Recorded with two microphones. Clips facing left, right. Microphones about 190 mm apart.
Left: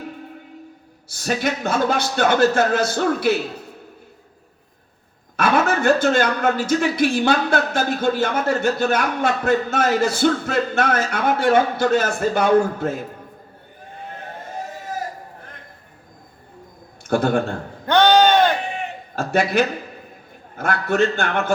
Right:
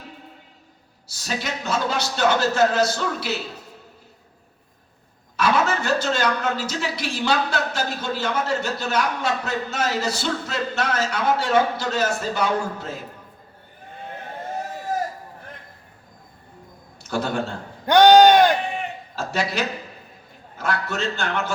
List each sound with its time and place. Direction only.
1.0 s a man's voice: 55° left (ahead or behind)
5.4 s a man's voice: 55° left (ahead or behind)
17.1 s a man's voice: 55° left (ahead or behind)
17.8 s sheep: 15° right (ahead or behind)
19.1 s a man's voice: 55° left (ahead or behind)